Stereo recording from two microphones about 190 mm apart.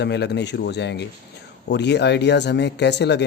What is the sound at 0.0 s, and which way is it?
Speech, 60° left (ahead or behind).